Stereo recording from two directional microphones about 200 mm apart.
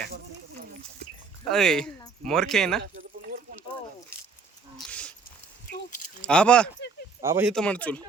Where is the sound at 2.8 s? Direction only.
45° right (ahead or behind).